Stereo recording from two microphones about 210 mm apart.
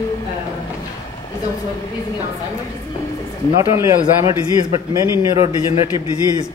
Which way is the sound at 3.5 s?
15° right (ahead or behind).